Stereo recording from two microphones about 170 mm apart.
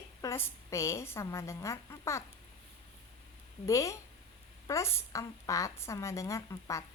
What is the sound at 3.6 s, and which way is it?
A woman's voice, 20° left (ahead or behind).